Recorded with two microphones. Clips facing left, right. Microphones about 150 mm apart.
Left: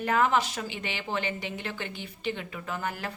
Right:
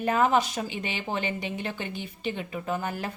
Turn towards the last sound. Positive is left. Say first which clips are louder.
# right 3 dB
turn(degrees=-20)  # may be behind; listen again after turning